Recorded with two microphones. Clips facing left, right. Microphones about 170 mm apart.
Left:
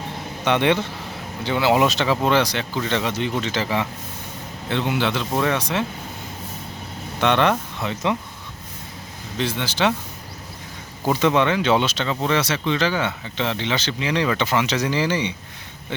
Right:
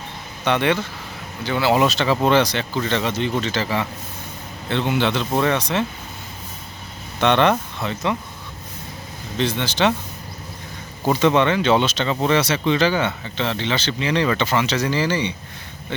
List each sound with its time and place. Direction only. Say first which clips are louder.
0.4 s speech: left 1 dB; 20° left (ahead or behind)
7.2 s speech: right 2 dB; 5° left (ahead or behind)
9.4 s speech: right 2 dB; 10° left (ahead or behind)
11.1 s speech: right 2 dB; 5° left (ahead or behind)
13.3 s speech: left 1 dB; 15° left (ahead or behind)